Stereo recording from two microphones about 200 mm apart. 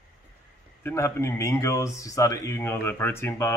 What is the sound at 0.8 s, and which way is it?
Speech, 15° left (ahead or behind).